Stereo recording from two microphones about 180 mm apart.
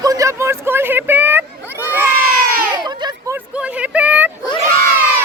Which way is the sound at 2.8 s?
25° right (ahead or behind).